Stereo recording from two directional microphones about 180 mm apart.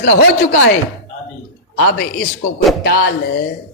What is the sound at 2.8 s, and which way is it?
Speech, 65° left (ahead or behind).